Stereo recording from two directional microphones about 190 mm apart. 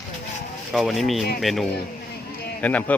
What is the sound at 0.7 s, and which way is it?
A man's voice, centre (ahead or behind).